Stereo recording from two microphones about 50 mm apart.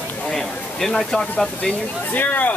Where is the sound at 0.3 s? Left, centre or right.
Centre.